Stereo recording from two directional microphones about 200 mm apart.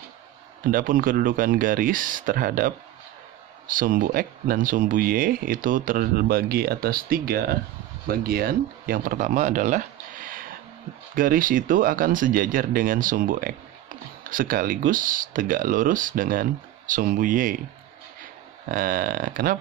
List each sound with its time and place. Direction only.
0.7 s speech: 45° right (ahead or behind)
18.7 s speech: 45° right (ahead or behind)